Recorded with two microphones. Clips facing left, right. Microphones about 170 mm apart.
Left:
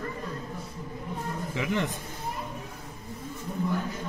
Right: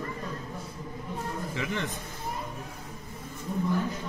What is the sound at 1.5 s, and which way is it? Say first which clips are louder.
Speech: left 6 dB; 15° left (ahead or behind).